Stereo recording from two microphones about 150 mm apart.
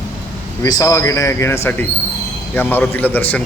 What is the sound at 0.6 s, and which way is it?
A man's voice, 25° left (ahead or behind).